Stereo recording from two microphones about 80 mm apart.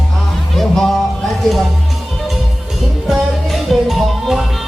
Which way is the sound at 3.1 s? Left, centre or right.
Centre.